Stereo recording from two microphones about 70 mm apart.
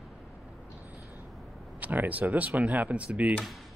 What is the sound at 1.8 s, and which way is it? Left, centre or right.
Speech, right.